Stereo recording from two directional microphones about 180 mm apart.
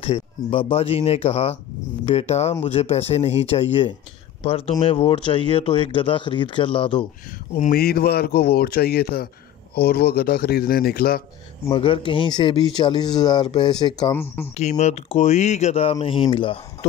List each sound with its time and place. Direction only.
0.0 s speech: 35° left (ahead or behind)
7.7 s speech: 60° left (ahead or behind)
11.7 s speech: 30° left (ahead or behind)
14.1 s speech: 10° left (ahead or behind)
14.5 s speech: 40° left (ahead or behind)